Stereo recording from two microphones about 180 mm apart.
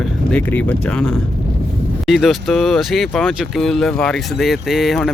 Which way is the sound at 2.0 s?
Centre (ahead or behind).